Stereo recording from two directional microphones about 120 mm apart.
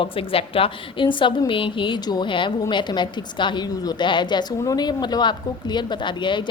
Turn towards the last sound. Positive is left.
turn(degrees=40)  # may be behind; listen again after turning